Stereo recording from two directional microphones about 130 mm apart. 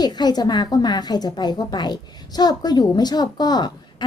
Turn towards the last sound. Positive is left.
turn(degrees=30)  # may be behind; listen again after turning